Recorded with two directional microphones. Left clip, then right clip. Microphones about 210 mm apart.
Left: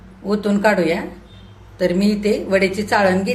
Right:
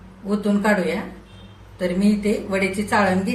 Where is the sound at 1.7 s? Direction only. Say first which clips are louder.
Left 4 dB; 45° left (ahead or behind).